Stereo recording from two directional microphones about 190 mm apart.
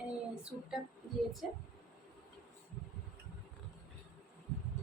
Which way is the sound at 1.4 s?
5° right (ahead or behind).